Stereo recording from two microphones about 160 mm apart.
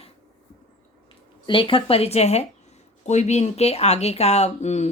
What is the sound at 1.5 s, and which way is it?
Speech, 35° left (ahead or behind).